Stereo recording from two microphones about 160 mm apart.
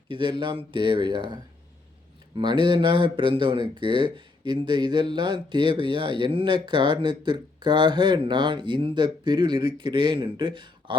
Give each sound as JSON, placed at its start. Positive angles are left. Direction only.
{"t": 0.1, "sound": "speech", "side_deg": -30}